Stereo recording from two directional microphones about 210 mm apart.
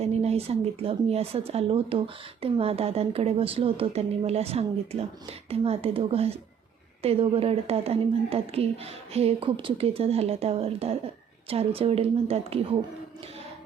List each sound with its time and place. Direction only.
0.0 s a woman's voice: 30° right (ahead or behind)